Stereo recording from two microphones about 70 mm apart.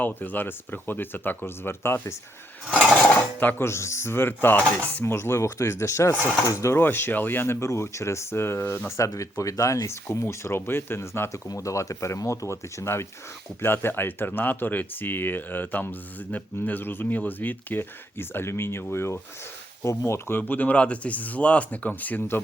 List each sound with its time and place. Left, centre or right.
0.0 s speech: left
3.6 s speech: left
5.0 s speech: left
6.7 s speech: left
9.0 s speech: left